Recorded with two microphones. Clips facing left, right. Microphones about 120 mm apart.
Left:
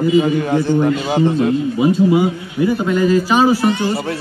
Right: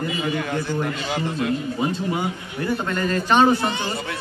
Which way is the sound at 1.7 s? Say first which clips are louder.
Left 11 dB; 10° left (ahead or behind).